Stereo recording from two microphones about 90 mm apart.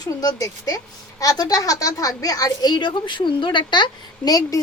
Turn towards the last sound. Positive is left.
turn(degrees=60)  # may be behind; listen again after turning